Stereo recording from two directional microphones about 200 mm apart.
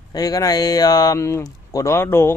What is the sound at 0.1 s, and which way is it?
A man's voice, 20° left (ahead or behind).